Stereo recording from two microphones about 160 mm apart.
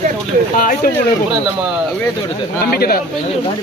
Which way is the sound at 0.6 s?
60° left (ahead or behind).